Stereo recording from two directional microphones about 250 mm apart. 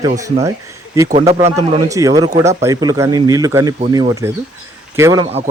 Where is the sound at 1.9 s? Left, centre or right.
Centre.